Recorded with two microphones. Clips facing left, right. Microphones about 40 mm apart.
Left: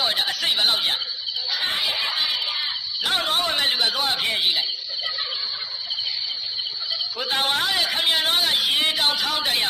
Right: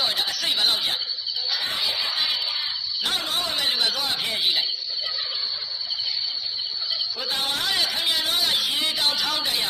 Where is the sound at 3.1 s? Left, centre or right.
Left.